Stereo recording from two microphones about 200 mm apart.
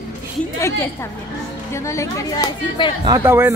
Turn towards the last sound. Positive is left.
turn(degrees=-10)  # may be behind; listen again after turning